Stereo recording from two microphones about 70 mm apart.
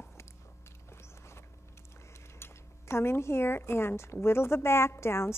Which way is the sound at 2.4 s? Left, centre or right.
Left.